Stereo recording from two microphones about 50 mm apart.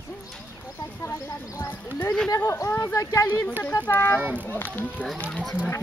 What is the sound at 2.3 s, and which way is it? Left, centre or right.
Speech, left.